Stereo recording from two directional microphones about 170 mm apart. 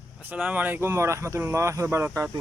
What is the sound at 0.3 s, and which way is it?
Speech, 10° right (ahead or behind).